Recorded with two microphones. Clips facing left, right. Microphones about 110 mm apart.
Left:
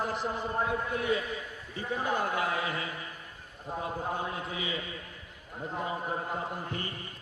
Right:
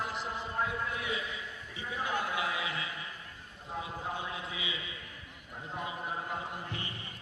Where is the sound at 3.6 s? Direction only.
45° left (ahead or behind).